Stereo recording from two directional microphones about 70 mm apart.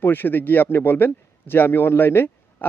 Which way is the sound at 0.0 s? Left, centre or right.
Left.